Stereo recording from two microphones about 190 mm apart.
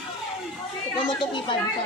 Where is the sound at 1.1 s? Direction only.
25° left (ahead or behind).